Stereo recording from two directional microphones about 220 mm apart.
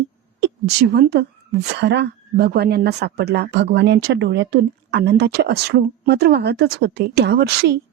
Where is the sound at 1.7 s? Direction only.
50° right (ahead or behind).